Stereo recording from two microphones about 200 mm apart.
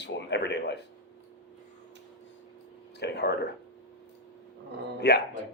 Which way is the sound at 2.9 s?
55° left (ahead or behind).